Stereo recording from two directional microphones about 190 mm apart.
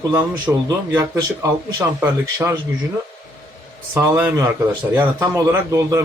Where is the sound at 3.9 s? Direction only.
10° right (ahead or behind).